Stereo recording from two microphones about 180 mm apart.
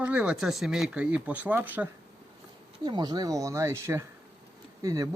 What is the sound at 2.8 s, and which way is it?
Speech, 25° right (ahead or behind).